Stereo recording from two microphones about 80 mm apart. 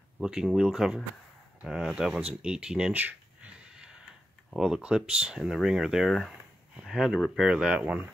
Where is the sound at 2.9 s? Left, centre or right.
Right.